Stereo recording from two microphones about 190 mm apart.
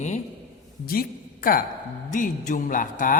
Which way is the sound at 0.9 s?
50° left (ahead or behind).